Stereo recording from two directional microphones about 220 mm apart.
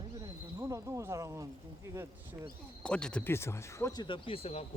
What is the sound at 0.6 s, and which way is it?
Speech, 15° right (ahead or behind).